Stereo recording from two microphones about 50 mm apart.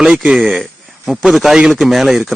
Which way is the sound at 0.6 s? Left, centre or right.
Centre.